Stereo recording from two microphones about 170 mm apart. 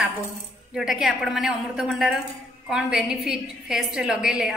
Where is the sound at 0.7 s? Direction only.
Centre (ahead or behind).